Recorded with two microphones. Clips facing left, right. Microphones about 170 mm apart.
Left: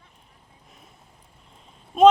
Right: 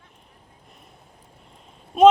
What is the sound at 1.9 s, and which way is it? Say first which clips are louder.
Speech: right 1 dB; 5° right (ahead or behind).